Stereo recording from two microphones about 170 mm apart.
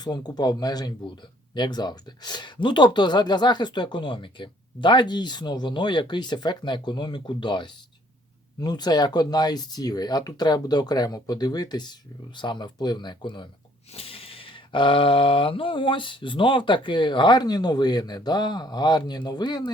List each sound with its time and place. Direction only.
0.0 s speech: 25° left (ahead or behind)